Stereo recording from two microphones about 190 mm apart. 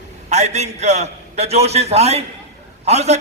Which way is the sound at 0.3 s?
35° right (ahead or behind).